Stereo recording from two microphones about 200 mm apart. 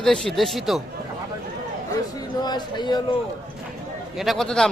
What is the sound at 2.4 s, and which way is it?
Speech, 20° left (ahead or behind).